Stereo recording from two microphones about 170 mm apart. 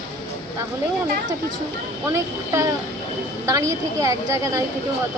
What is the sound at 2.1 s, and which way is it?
A woman's voice, 15° right (ahead or behind).